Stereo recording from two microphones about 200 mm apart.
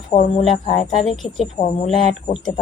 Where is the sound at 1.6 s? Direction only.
30° left (ahead or behind).